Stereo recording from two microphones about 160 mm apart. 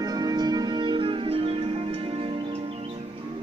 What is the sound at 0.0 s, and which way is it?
Music, 25° right (ahead or behind).